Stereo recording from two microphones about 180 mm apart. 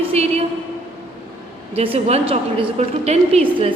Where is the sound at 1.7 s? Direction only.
30° right (ahead or behind).